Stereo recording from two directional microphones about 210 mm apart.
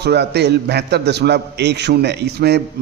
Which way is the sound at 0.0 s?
50° right (ahead or behind).